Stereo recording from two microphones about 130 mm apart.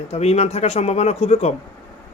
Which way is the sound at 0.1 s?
55° left (ahead or behind).